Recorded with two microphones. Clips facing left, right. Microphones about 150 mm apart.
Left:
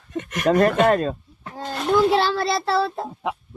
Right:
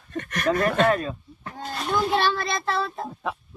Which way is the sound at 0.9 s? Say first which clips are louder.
Left 4 dB; 40° left (ahead or behind).